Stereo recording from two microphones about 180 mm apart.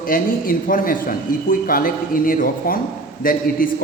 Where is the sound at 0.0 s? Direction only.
50° left (ahead or behind).